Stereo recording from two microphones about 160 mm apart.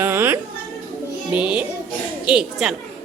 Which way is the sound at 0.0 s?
15° right (ahead or behind).